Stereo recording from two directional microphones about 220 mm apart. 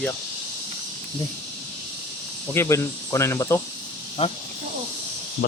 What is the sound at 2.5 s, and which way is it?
Speech, 10° left (ahead or behind).